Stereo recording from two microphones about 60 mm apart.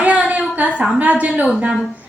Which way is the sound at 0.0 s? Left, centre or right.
Right.